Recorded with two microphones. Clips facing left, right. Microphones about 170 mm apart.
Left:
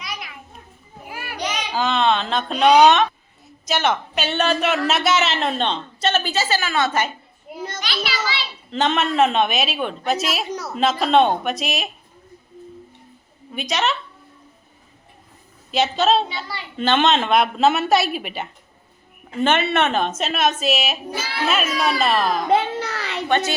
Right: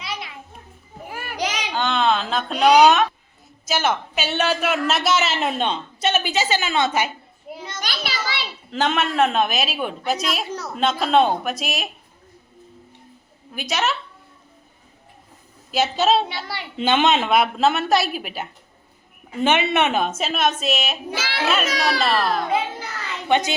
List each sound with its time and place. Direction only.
0.0 s children playing: 30° right (ahead or behind)
1.7 s a woman's voice: centre (ahead or behind); by 7.1 s 15° right (ahead or behind)
7.8 s children playing: 50° right (ahead or behind)
8.7 s a woman's voice: centre (ahead or behind)
13.5 s a woman's voice: centre (ahead or behind)
15.7 s a woman's voice: 5° right (ahead or behind)
19.3 s a woman's voice: 10° right (ahead or behind)
21.2 s a child's voice: 90° right
21.4 s a woman's voice: centre (ahead or behind)
22.5 s a sound: 75° left (ahead or behind)
23.3 s a woman's voice: 15° right (ahead or behind)